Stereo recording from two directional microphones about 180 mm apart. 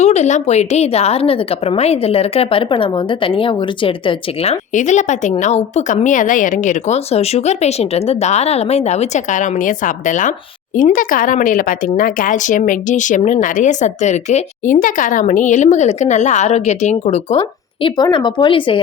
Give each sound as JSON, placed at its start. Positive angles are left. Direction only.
{"t": 0.0, "sound": "a woman's voice", "side_deg": 40}
{"t": 4.7, "sound": "a woman's voice", "side_deg": 40}
{"t": 17.8, "sound": "speech", "side_deg": 25}